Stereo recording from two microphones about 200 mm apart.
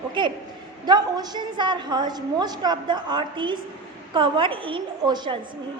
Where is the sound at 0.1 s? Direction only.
25° right (ahead or behind).